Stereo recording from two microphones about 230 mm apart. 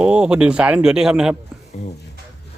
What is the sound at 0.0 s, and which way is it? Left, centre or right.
Speech, centre.